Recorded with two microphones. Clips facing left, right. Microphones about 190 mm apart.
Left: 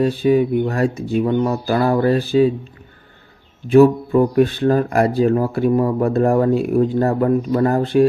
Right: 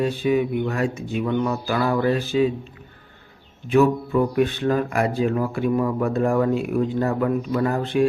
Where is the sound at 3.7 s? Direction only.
35° left (ahead or behind).